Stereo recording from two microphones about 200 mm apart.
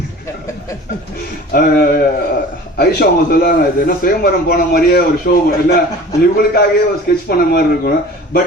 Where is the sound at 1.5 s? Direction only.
45° left (ahead or behind).